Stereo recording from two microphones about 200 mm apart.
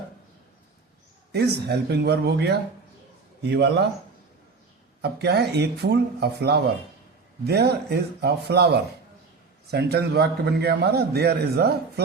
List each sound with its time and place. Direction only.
1.3 s speech: 55° right (ahead or behind)
5.0 s a man's voice: 55° right (ahead or behind)